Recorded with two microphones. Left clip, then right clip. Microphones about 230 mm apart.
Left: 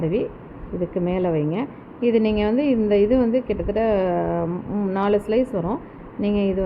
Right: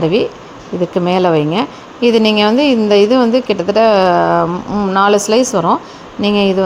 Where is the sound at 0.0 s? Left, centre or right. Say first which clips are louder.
Right 10 dB; right.